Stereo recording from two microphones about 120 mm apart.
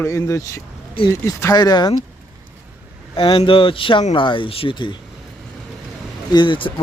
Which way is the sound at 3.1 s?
50° left (ahead or behind).